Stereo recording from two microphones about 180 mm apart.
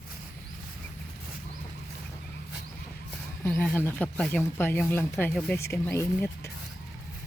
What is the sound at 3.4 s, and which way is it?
Speech, 10° left (ahead or behind).